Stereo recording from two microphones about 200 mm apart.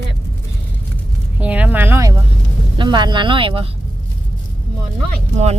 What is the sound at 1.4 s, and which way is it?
Speech, 5° right (ahead or behind).